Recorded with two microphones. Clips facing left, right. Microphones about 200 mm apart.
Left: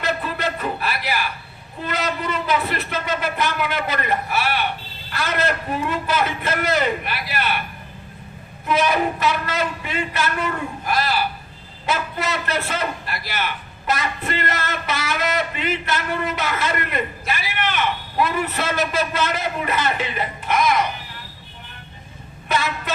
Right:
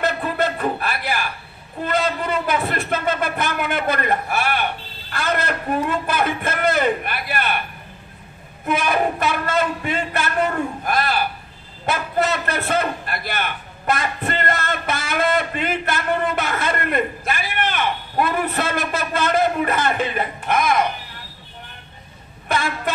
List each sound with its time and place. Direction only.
0.0 s a sound: 55° right (ahead or behind)
1.9 s a man's voice: 55° right (ahead or behind)
8.7 s a man's voice: 50° right (ahead or behind)